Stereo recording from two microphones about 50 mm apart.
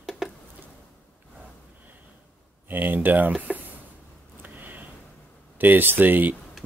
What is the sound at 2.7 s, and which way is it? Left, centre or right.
Speech, right.